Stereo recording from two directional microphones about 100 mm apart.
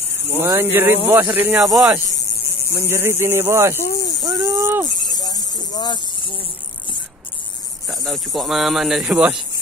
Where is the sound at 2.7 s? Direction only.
25° right (ahead or behind).